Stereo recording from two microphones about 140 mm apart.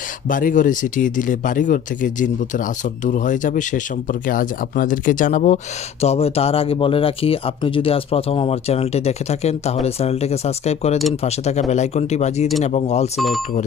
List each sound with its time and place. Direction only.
0.3 s speech: 70° left (ahead or behind)
6.0 s speech: 45° left (ahead or behind)
13.1 s speech: centre (ahead or behind)